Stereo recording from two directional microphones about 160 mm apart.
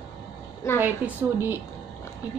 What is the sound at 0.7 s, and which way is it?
Speech, 15° right (ahead or behind).